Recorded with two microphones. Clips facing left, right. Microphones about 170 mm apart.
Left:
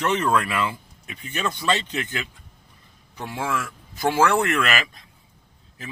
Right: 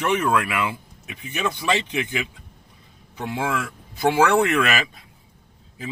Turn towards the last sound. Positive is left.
turn(degrees=-15)  # may be behind; listen again after turning